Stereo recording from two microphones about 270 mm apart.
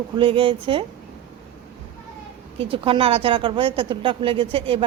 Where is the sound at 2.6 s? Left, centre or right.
Centre.